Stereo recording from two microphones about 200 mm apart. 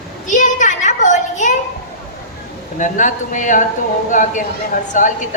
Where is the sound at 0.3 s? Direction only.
40° left (ahead or behind).